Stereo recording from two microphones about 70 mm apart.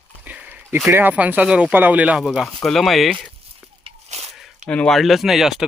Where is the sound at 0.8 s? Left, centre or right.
Right.